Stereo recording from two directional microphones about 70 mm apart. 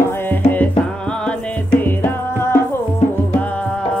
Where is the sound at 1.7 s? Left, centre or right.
Left.